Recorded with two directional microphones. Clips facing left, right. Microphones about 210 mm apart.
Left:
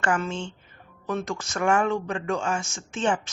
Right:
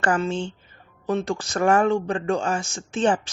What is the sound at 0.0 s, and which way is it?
Speech, 35° right (ahead or behind).